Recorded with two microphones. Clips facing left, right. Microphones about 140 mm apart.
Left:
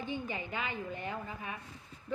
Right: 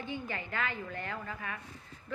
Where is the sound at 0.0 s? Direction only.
15° left (ahead or behind).